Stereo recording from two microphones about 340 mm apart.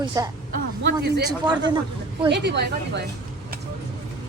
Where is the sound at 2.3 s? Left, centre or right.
Right.